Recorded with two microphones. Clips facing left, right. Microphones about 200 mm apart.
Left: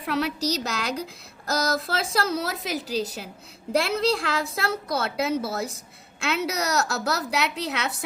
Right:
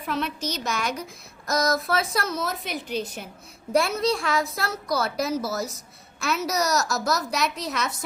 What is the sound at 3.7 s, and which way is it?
A woman's voice, 30° left (ahead or behind).